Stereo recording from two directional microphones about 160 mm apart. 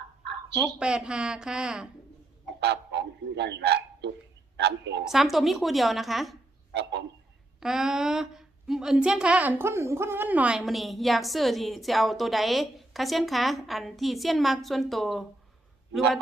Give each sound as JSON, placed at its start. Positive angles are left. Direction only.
{"t": 0.6, "sound": "a woman's voice", "side_deg": -5}
{"t": 2.6, "sound": "a woman's voice", "side_deg": -90}
{"t": 5.0, "sound": "a woman's voice", "side_deg": 0}
{"t": 7.6, "sound": "a woman's voice", "side_deg": -5}